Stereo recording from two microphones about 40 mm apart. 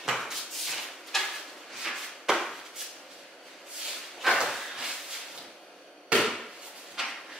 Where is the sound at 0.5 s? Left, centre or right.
Centre.